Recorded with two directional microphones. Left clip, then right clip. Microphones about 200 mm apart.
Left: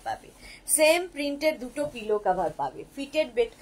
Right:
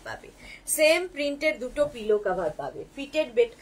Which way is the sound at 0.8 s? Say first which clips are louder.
Even; 10° right (ahead or behind).